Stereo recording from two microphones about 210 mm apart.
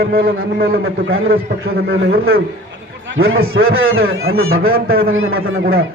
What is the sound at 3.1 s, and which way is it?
A man's voice, 65° right (ahead or behind).